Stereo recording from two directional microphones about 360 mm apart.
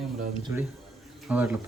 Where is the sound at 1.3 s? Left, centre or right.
Centre.